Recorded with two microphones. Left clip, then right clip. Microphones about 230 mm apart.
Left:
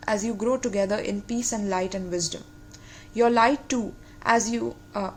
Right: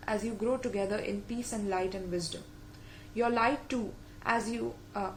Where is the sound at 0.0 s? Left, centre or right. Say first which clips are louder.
Left 7 dB; left.